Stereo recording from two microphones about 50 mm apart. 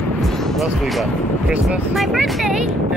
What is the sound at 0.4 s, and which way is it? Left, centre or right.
Speech, centre.